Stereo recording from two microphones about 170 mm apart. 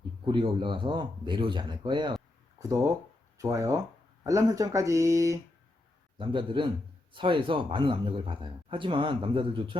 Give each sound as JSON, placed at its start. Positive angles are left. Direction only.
{"t": 0.3, "sound": "a man's voice", "side_deg": -30}
{"t": 6.1, "sound": "a man's voice", "side_deg": -30}